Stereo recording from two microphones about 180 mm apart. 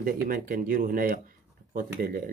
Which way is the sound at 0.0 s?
50° right (ahead or behind).